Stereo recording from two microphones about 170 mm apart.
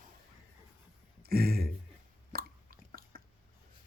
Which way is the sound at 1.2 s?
65° right (ahead or behind).